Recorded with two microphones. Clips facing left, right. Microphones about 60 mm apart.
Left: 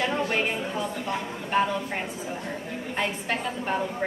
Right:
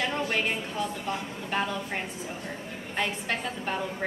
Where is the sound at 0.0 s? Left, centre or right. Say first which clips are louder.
Left 3 dB; centre.